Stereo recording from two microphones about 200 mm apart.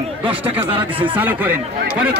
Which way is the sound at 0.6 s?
25° right (ahead or behind).